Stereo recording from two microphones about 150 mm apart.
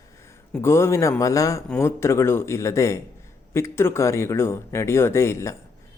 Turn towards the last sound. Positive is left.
turn(degrees=20)  # may be behind; listen again after turning